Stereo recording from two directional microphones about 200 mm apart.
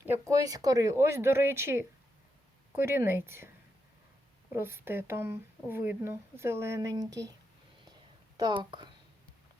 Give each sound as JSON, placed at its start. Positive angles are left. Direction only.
{"t": 0.0, "sound": "speech", "side_deg": -10}
{"t": 4.5, "sound": "speech", "side_deg": -10}
{"t": 8.4, "sound": "speech", "side_deg": -20}